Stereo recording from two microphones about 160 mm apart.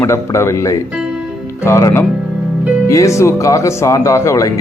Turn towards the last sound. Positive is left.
turn(degrees=20)  # may be behind; listen again after turning